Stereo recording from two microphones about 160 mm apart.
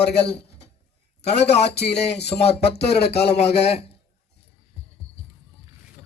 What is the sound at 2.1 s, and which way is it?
Speech, 40° left (ahead or behind).